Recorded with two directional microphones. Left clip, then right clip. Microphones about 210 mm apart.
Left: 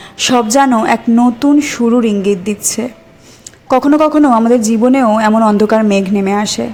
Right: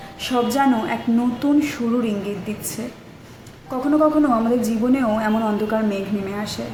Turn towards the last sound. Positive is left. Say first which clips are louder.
# left 12 dB
turn(degrees=45)  # may be behind; listen again after turning